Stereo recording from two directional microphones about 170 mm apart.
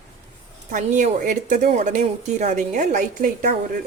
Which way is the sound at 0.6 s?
45° right (ahead or behind).